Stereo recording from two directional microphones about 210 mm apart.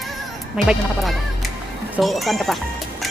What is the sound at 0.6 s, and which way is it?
Fowl, centre (ahead or behind).